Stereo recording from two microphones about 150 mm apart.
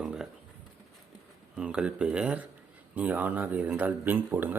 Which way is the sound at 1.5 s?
5° right (ahead or behind).